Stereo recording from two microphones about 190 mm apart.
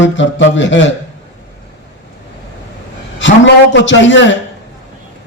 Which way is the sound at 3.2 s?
75° left (ahead or behind).